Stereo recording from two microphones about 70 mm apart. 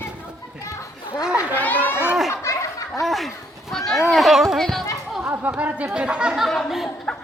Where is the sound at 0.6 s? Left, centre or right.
Left.